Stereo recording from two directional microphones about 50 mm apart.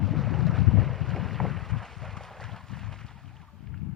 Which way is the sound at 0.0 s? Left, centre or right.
Centre.